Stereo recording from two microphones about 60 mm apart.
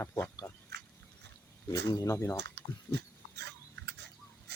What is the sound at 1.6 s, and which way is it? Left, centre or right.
Speech, left.